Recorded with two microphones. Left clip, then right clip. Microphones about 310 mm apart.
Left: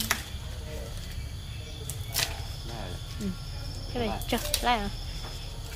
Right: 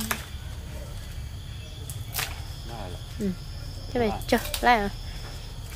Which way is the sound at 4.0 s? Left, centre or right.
Centre.